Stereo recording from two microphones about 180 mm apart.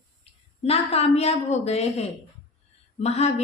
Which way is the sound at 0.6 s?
35° left (ahead or behind).